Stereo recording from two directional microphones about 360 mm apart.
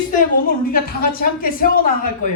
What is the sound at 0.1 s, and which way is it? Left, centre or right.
Speech, left.